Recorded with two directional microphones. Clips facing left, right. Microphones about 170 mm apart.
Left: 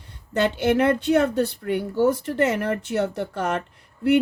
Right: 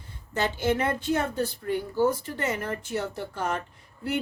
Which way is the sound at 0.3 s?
65° left (ahead or behind).